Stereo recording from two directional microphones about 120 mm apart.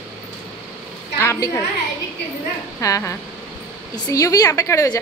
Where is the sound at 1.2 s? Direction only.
25° left (ahead or behind).